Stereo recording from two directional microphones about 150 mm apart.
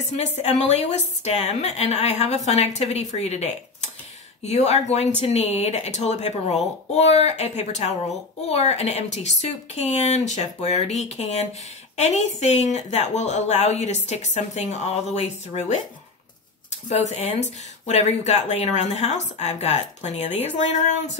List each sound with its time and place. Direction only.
0.1 s a woman's voice: 50° left (ahead or behind)
16.9 s a woman's voice: 45° left (ahead or behind)